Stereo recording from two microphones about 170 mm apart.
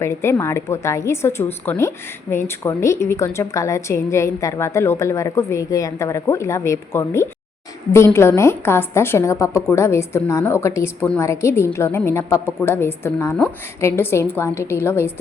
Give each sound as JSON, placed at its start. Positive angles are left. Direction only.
{"t": 0.0, "sound": "a woman's voice", "side_deg": 15}